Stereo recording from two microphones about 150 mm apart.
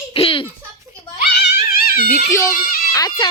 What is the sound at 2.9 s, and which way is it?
Speech, 25° left (ahead or behind).